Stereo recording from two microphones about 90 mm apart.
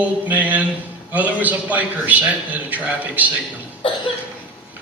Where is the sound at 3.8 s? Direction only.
80° left.